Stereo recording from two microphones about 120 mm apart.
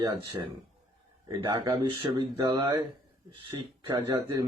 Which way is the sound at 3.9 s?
30° right (ahead or behind).